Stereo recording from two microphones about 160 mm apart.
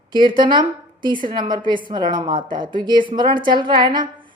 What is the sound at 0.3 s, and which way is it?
A woman's voice, 30° right (ahead or behind).